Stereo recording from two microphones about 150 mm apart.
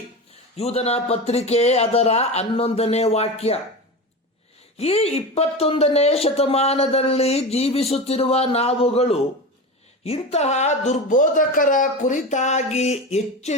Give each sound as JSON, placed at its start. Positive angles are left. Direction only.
{"t": 0.5, "sound": "speech", "side_deg": 45}
{"t": 4.8, "sound": "speech", "side_deg": 45}